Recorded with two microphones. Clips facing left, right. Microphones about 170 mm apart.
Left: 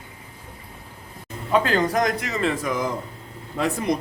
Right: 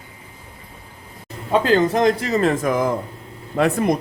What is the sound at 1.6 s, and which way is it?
A man's voice, 25° right (ahead or behind).